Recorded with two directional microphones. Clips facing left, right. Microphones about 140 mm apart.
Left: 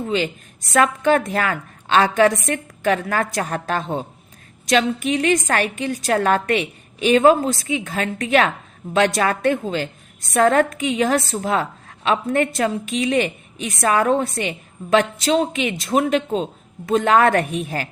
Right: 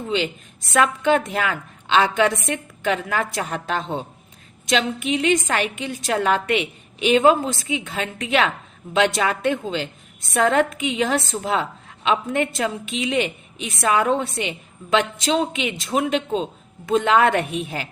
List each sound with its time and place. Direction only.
0.7 s a woman's voice: 40° left (ahead or behind)